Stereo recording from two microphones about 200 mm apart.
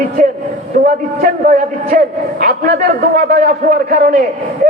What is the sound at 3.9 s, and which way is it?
Speech, 45° right (ahead or behind).